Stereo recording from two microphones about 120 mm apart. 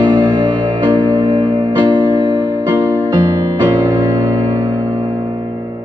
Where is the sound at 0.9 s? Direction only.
40° right (ahead or behind).